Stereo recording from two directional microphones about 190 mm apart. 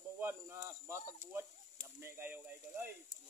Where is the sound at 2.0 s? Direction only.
10° right (ahead or behind).